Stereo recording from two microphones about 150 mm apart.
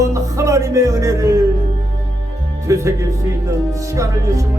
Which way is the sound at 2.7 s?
20° right (ahead or behind).